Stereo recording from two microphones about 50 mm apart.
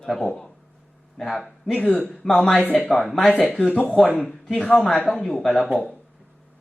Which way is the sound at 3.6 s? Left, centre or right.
Left.